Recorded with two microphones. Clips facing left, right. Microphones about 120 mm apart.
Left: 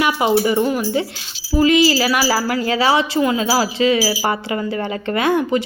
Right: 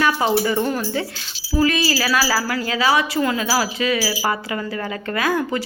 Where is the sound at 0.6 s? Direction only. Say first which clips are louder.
Left 3 dB; 5° left (ahead or behind).